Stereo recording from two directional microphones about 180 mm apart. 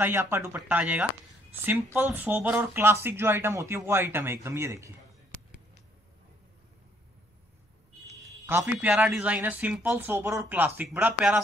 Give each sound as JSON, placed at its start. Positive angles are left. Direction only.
{"t": 0.0, "sound": "speech", "side_deg": -15}
{"t": 8.2, "sound": "speech", "side_deg": -15}